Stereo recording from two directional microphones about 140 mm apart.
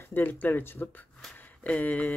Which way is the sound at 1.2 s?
10° left (ahead or behind).